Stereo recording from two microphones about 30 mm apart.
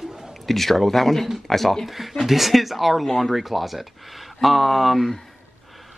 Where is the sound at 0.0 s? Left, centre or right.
Centre.